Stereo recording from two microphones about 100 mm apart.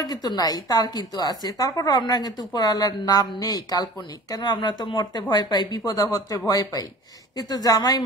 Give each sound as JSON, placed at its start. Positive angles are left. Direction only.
{"t": 0.0, "sound": "a woman's voice", "side_deg": 40}